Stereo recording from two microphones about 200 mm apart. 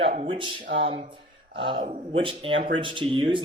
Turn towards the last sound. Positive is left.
turn(degrees=-25)  # may be behind; listen again after turning